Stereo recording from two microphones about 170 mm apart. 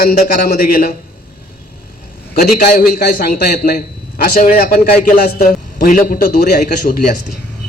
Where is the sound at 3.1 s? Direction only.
65° left (ahead or behind).